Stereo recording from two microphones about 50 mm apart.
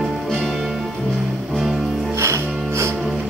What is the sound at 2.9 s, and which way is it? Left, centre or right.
Music, centre.